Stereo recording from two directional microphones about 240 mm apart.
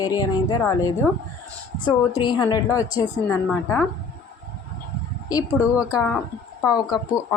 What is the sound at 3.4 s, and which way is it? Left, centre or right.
Speech, centre.